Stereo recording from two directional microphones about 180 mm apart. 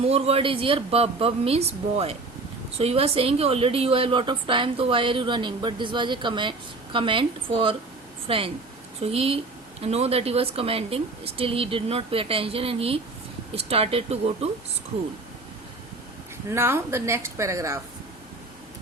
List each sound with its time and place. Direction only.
0.0 s a woman's voice: 35° right (ahead or behind)
16.5 s a woman's voice: 15° right (ahead or behind)